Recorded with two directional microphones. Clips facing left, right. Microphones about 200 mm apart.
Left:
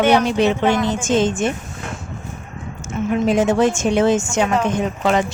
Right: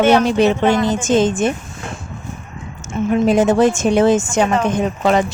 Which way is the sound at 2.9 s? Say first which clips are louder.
Right 3 dB; 35° right (ahead or behind).